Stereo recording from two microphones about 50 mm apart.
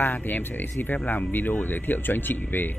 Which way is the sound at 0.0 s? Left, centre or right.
Left.